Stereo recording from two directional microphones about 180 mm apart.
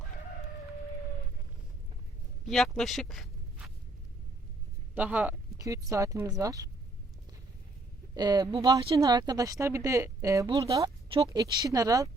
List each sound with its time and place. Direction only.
2.5 s speech: centre (ahead or behind)
4.9 s a woman's voice: 10° right (ahead or behind)
8.1 s a woman's voice: 20° right (ahead or behind)